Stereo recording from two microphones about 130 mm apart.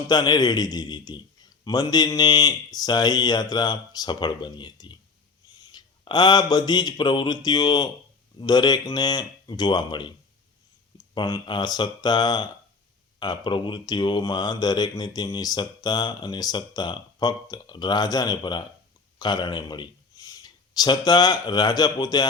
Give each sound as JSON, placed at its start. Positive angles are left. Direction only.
{"t": 0.1, "sound": "a man's voice", "side_deg": 30}